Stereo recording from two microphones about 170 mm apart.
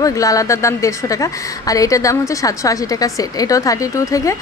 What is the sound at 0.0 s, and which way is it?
A woman's voice, 20° left (ahead or behind).